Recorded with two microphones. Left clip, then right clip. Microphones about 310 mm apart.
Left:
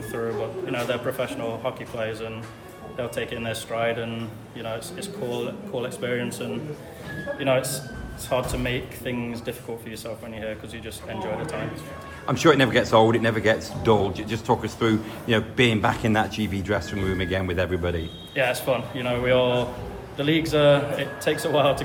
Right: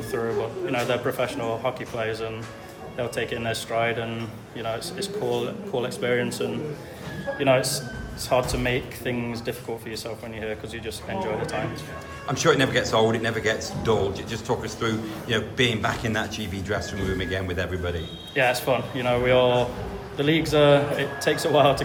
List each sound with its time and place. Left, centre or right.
0.7 s speech: centre
12.2 s a man's voice: left
18.3 s speech: centre